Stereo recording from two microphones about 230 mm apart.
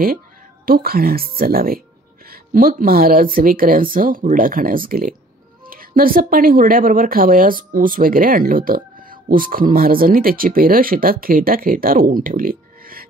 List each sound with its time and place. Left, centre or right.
0.7 s speech: right